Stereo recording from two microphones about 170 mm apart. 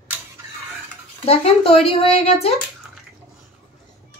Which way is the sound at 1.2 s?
35° left (ahead or behind).